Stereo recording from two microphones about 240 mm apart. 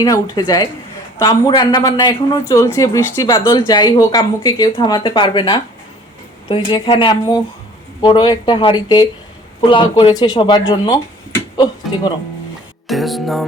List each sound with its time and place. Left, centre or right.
0.0 s speech: centre
12.9 s music: centre